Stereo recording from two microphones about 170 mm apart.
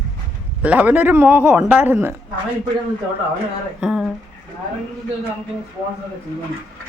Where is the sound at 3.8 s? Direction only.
5° right (ahead or behind).